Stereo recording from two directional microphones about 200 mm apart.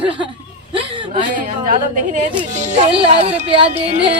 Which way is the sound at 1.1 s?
40° right (ahead or behind).